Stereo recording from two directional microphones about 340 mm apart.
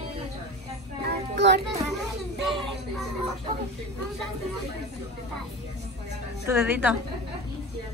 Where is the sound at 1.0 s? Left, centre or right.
Right.